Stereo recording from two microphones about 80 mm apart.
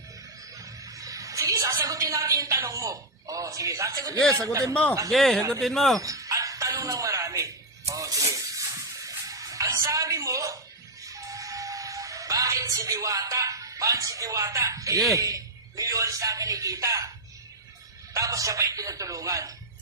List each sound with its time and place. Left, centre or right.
0.6 s a sound: right
4.4 s speech: right
4.7 s speech: centre
5.1 s speech: centre
5.4 s speech: right
5.6 s speech: centre
6.0 s a sound: right
7.9 s snake: right
9.0 s music: right
15.1 s a man's voice: right
18.1 s a man's voice: right